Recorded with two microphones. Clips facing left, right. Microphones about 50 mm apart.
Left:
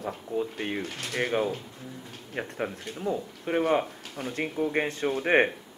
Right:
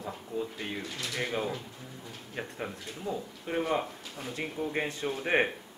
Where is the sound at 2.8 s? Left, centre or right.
Left.